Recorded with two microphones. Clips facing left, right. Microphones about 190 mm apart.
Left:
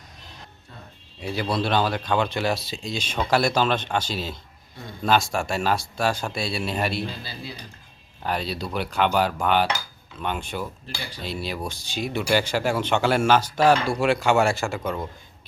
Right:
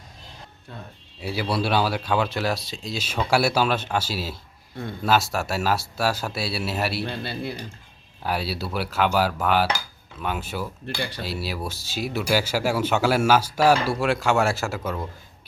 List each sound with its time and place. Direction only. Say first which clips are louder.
1.2 s speech: even; 5° right (ahead or behind)
7.0 s speech: right 4 dB; 65° right (ahead or behind)
8.2 s speech: even; 5° right (ahead or behind)
10.9 s speech: right 7 dB; 65° right (ahead or behind)
11.2 s speech: even; 5° right (ahead or behind)